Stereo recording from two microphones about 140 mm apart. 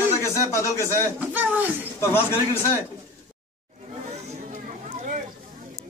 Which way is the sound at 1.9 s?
15° left (ahead or behind).